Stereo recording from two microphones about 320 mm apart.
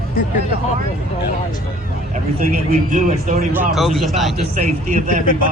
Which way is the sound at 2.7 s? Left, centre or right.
Right.